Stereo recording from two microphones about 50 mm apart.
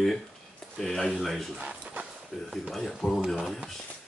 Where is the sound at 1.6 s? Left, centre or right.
Right.